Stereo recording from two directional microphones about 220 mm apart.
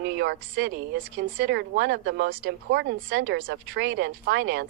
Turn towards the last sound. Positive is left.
turn(degrees=-45)  # may be behind; listen again after turning